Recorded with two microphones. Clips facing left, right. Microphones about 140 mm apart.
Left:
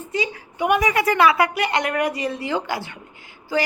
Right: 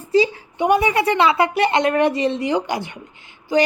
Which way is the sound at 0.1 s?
30° right (ahead or behind).